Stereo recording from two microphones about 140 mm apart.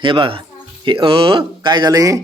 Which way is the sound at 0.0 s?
40° right (ahead or behind).